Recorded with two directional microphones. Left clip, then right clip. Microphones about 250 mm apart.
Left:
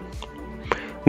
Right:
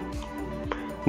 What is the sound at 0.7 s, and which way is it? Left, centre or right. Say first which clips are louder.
Music: left 9 dB; left.